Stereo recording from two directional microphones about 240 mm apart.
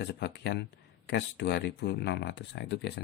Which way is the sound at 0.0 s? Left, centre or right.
Left.